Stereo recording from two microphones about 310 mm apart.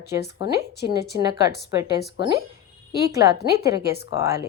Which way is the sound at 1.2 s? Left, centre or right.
Centre.